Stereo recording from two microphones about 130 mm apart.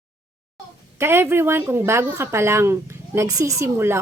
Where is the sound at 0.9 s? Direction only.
20° right (ahead or behind).